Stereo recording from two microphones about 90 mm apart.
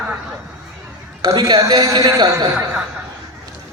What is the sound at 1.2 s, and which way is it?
A woman's voice, 45° right (ahead or behind).